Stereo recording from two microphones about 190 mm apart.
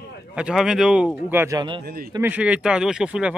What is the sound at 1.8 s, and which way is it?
Speech, 50° right (ahead or behind).